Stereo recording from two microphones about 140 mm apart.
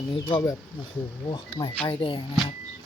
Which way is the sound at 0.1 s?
35° left (ahead or behind).